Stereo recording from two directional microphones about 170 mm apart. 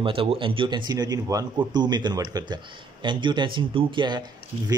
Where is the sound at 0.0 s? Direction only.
30° right (ahead or behind).